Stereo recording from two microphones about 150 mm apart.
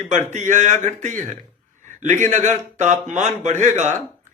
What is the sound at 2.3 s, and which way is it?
Speech, 50° right (ahead or behind).